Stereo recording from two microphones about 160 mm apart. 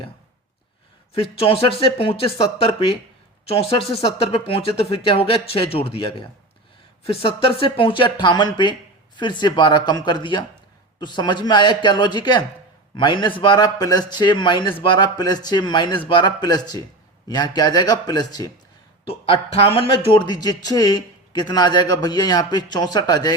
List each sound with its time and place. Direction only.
1.1 s a man's voice: 35° left (ahead or behind)
19.0 s a man's voice: 40° left (ahead or behind)